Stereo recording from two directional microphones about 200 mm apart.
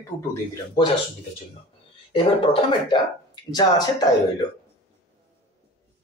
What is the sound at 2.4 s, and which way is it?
A man's voice, 25° left (ahead or behind).